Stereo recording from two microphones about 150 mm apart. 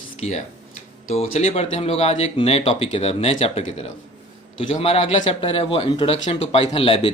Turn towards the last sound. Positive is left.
turn(degrees=40)  # may be behind; listen again after turning